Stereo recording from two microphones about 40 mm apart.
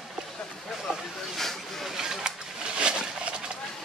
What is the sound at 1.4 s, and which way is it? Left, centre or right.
Vehicle, centre.